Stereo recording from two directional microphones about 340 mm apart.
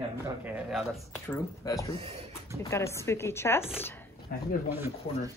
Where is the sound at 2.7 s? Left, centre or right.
Centre.